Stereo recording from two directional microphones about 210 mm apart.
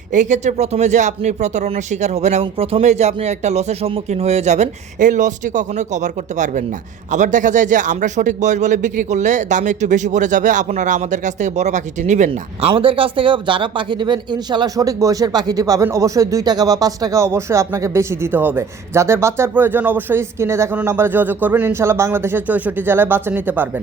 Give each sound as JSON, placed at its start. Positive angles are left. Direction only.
{"t": 0.1, "sound": "speech", "side_deg": -35}